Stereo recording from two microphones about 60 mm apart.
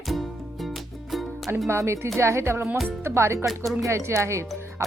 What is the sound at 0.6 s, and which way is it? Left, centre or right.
Music, centre.